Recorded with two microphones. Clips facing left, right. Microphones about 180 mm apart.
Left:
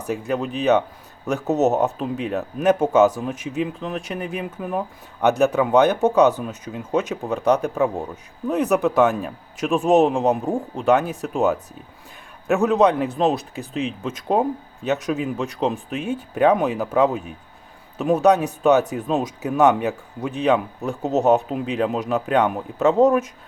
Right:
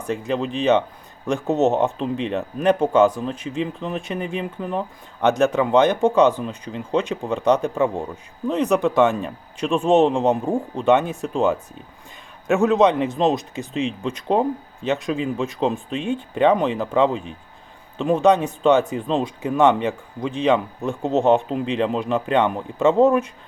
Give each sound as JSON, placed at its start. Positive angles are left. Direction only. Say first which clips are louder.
{"t": 0.3, "sound": "speech", "louder": "even", "side_deg": 5}